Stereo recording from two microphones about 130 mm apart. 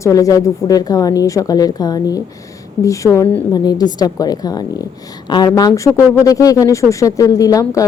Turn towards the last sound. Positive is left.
turn(degrees=25)  # may be behind; listen again after turning